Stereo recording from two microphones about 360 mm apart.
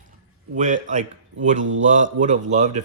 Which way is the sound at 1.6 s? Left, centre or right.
Right.